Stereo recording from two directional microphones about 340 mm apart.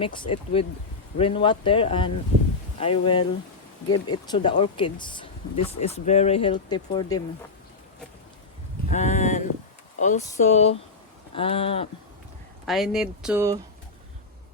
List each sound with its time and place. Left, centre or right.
0.0 s speech: centre
3.8 s speech: left
4.1 s speech: centre
8.9 s a sound: left
10.0 s speech: left
12.6 s speech: centre